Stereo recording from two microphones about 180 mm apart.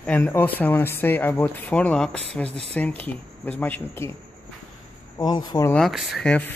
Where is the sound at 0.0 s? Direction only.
10° left (ahead or behind).